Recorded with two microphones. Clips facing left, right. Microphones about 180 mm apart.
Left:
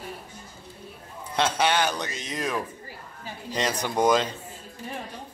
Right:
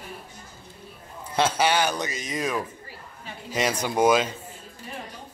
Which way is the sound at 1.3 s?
5° right (ahead or behind).